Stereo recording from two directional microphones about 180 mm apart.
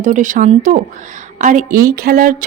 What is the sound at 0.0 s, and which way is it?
A woman's voice, 45° right (ahead or behind).